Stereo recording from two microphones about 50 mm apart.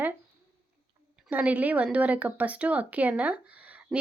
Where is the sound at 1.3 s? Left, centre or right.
Right.